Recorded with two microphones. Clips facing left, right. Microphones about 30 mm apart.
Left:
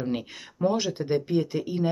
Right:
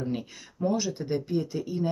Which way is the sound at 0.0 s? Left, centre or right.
Left.